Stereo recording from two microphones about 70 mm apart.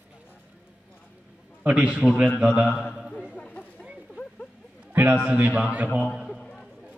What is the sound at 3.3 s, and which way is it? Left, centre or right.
Chatter, centre.